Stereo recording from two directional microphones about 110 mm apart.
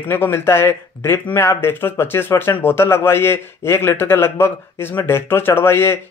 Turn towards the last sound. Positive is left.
turn(degrees=20)  # may be behind; listen again after turning